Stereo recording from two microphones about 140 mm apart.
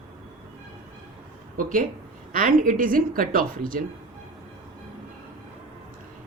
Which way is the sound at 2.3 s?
75° right (ahead or behind).